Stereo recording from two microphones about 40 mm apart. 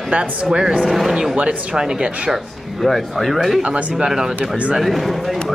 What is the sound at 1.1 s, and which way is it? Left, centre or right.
Speech, centre.